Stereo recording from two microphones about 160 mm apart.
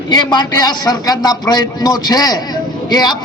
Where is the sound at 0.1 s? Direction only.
25° left (ahead or behind).